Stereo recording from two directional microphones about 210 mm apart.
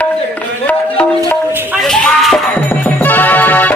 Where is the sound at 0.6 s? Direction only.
5° left (ahead or behind).